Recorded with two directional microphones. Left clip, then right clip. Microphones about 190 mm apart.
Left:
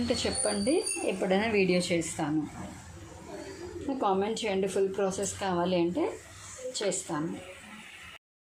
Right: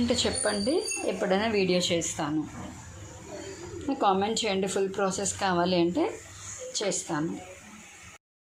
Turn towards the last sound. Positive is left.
turn(degrees=0)  # may be behind; listen again after turning